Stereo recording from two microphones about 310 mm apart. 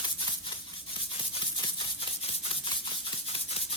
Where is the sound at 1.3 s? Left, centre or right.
Centre.